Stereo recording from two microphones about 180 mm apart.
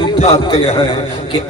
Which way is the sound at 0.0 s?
30° left (ahead or behind).